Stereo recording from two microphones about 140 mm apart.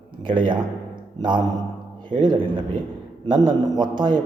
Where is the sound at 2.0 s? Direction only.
35° right (ahead or behind).